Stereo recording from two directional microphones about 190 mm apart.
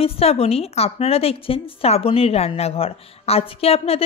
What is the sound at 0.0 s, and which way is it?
A woman's voice, 30° left (ahead or behind).